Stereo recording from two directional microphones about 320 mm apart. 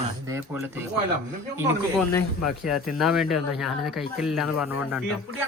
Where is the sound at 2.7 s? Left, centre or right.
Centre.